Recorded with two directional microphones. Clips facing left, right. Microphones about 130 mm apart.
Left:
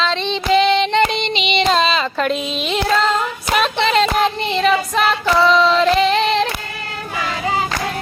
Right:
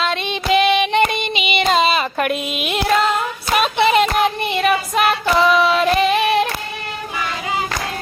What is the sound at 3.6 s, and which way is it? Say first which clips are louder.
Child singing: right 2 dB; 10° right (ahead or behind).